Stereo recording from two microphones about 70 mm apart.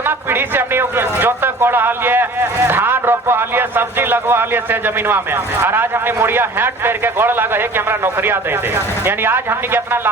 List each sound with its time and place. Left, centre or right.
0.0 s a man's voice: right